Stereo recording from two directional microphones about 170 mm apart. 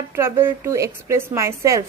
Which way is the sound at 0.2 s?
15° right (ahead or behind).